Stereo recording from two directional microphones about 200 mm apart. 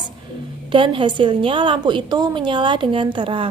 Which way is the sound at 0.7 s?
25° right (ahead or behind).